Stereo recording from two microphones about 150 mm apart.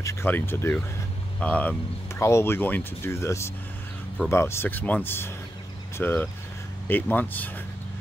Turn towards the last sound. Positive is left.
turn(degrees=10)  # may be behind; listen again after turning